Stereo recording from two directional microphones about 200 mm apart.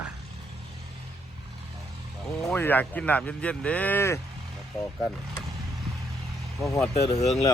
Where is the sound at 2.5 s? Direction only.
10° left (ahead or behind).